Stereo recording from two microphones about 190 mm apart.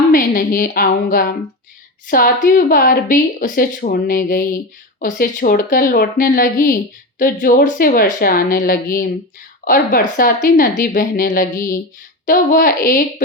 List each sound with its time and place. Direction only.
0.1 s a woman's voice: 50° left (ahead or behind)